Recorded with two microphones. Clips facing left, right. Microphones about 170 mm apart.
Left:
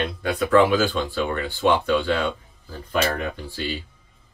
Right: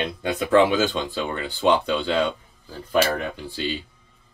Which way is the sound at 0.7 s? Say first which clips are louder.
Left 1 dB; 20° right (ahead or behind).